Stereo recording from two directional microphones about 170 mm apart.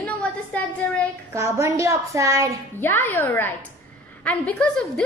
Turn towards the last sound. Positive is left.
turn(degrees=5)  # may be behind; listen again after turning